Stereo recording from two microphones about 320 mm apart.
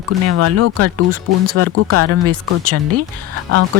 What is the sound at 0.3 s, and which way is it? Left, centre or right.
Speech, right.